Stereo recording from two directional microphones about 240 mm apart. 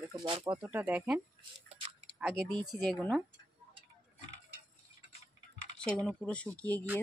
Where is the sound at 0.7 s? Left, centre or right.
Centre.